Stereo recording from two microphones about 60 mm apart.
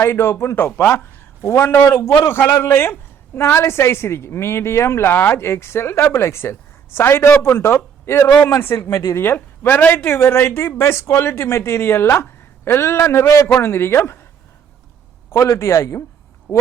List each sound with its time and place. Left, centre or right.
0.0 s speech: left
13.6 s speech: left
15.5 s speech: left